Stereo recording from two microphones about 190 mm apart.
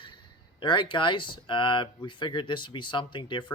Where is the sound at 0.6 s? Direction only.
25° left (ahead or behind).